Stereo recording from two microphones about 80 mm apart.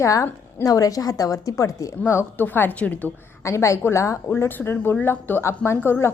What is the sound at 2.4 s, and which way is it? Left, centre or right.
Speech, left.